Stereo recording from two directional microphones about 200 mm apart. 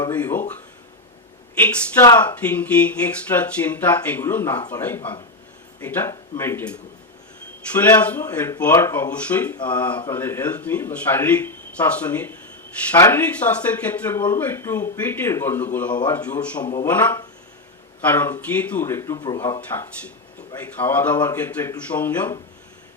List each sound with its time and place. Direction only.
0.2 s speech: 10° left (ahead or behind)
1.5 s speech: 10° left (ahead or behind)